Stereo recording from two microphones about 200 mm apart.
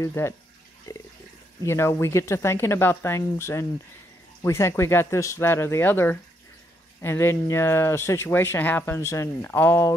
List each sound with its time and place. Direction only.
0.0 s speech: 10° left (ahead or behind)